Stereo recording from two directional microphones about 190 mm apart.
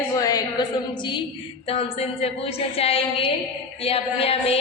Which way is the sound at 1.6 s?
30° left (ahead or behind).